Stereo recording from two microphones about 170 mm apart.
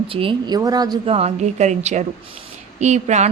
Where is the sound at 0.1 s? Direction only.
30° right (ahead or behind).